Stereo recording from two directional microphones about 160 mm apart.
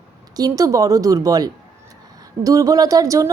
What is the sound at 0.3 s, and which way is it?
A woman's voice, 20° right (ahead or behind).